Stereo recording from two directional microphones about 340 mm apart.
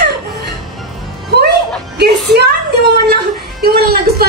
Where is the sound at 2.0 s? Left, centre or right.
Right.